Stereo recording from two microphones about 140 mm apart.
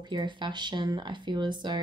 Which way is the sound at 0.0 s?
30° right (ahead or behind).